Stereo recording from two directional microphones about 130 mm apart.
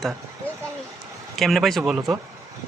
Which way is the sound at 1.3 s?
Centre (ahead or behind).